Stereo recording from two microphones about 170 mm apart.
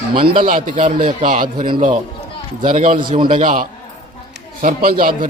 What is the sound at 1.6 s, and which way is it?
Speech, 30° right (ahead or behind).